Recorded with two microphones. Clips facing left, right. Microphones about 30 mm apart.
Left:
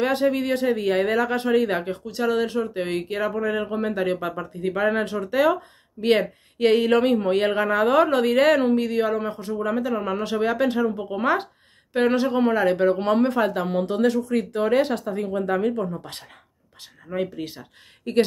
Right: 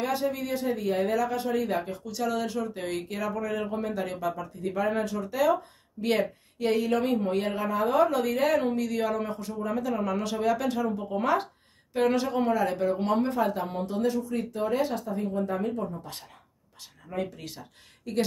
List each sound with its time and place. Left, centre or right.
0.0 s speech: left
2.0 s speech: left
5.9 s speech: left
6.6 s speech: left
8.6 s speech: left
9.0 s a man's voice: centre; by 16.3 s left
17.1 s speech: left
18.1 s speech: left